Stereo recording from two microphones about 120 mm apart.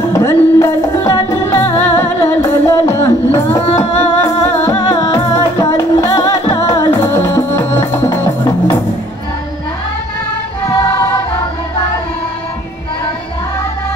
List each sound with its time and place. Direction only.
0.1 s music: 25° left (ahead or behind)
10.7 s music: 30° left (ahead or behind)